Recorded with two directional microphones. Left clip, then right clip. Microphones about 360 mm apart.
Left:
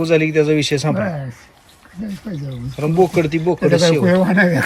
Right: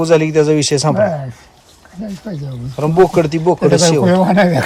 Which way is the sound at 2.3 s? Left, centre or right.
Right.